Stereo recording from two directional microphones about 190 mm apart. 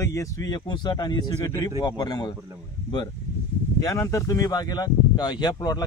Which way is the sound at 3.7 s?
15° left (ahead or behind).